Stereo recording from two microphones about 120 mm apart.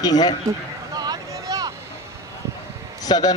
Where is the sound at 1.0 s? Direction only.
35° right (ahead or behind).